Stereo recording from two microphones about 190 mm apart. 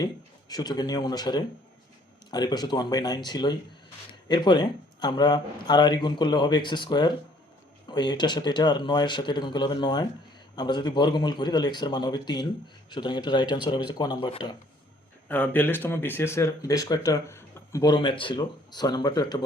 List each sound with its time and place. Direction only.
0.0 s speech: 20° left (ahead or behind)
15.3 s speech: 10° left (ahead or behind)